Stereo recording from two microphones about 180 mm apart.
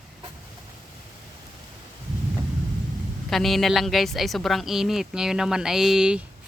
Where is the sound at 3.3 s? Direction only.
Centre (ahead or behind).